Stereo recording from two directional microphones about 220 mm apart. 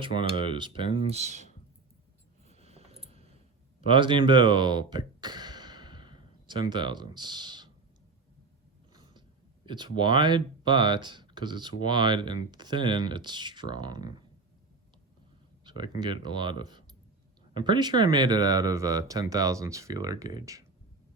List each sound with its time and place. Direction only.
0.0 s speech: 20° right (ahead or behind)
2.5 s a sound: 30° right (ahead or behind)
3.8 s speech: 25° right (ahead or behind)
8.9 s a sound: 20° right (ahead or behind)
9.6 s speech: 20° right (ahead or behind)
15.6 s speech: 20° right (ahead or behind)